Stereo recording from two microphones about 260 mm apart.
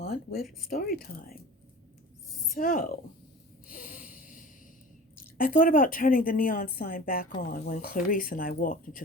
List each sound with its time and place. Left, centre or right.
0.0 s a woman's voice: left
2.6 s a woman's voice: left
3.7 s a sound: left
5.4 s a woman's voice: left